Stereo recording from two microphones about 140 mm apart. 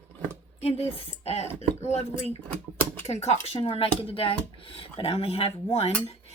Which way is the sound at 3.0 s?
50° left (ahead or behind).